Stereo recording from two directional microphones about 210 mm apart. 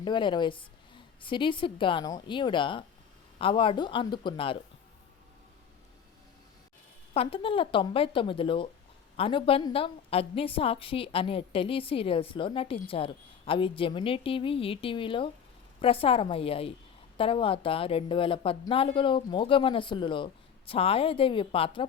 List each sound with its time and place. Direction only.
0.0 s a woman's voice: 20° left (ahead or behind)
7.1 s a woman's voice: 25° left (ahead or behind)